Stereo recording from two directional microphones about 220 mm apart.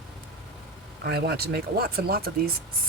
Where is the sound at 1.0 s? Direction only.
45° right (ahead or behind).